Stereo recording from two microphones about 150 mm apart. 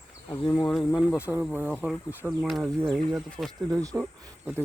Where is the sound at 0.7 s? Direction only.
Centre (ahead or behind).